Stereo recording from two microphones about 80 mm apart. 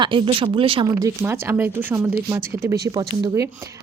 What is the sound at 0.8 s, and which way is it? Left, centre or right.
Speech, right.